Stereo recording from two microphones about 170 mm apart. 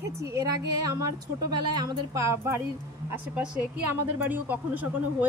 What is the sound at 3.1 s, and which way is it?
Speech, 5° right (ahead or behind).